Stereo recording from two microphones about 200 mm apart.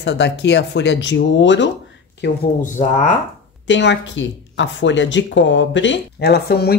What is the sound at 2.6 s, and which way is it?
Speech, 35° left (ahead or behind).